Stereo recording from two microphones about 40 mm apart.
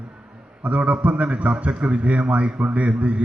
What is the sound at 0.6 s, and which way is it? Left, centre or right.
A man's voice, right.